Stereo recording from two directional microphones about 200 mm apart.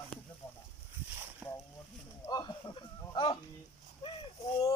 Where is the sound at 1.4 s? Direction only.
5° right (ahead or behind).